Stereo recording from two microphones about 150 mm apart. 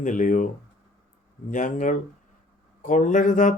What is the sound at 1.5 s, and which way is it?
Speech, 60° left (ahead or behind).